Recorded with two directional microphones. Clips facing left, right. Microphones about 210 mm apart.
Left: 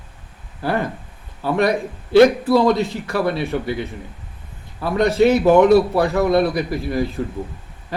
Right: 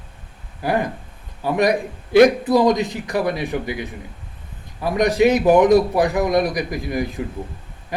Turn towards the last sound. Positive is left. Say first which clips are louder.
# left 2 dB
turn(degrees=-15)  # may be behind; listen again after turning